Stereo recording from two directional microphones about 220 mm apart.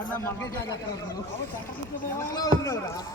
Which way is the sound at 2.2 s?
15° left (ahead or behind).